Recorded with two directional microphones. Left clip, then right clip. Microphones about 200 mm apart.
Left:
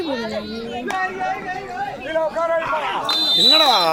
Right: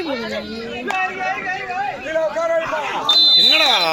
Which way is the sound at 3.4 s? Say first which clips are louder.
Even; 35° left (ahead or behind).